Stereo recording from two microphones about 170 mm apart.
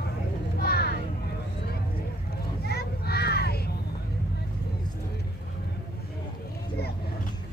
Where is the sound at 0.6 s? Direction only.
65° left (ahead or behind).